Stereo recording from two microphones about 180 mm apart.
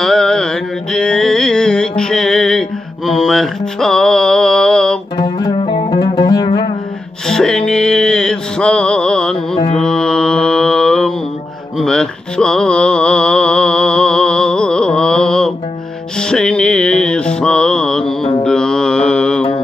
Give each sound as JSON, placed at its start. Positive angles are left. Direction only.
{"t": 0.0, "sound": "mantra", "side_deg": 5}
{"t": 5.1, "sound": "music", "side_deg": 25}
{"t": 7.2, "sound": "mantra", "side_deg": 5}